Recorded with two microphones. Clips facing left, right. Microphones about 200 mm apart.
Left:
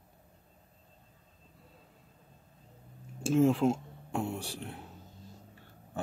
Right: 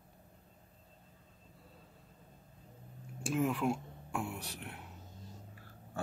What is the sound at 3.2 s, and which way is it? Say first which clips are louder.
Speech: left 7 dB; 25° left (ahead or behind).